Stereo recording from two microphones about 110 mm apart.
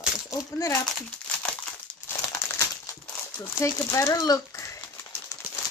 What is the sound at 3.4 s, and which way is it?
Speech, 25° left (ahead or behind).